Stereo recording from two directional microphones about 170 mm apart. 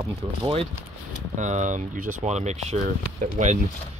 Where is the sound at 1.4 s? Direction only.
45° right (ahead or behind).